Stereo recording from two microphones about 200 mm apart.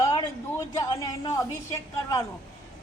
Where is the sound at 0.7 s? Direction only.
15° left (ahead or behind).